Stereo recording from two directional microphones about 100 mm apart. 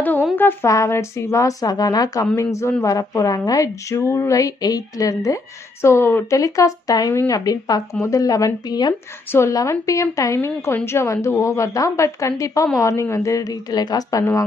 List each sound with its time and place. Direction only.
0.4 s a sound: 20° left (ahead or behind)
0.7 s a woman's voice: 30° left (ahead or behind)
9.3 s a woman's voice: 30° left (ahead or behind)